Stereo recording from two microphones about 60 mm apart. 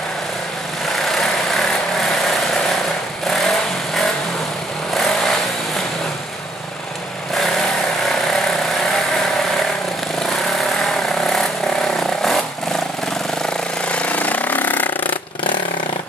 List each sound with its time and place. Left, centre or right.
1.1 s vehicle: centre
3.3 s vehicle: centre
11.2 s vehicle: centre
13.5 s a sound: centre